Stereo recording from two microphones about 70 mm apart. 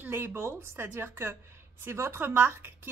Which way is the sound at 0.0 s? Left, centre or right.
Right.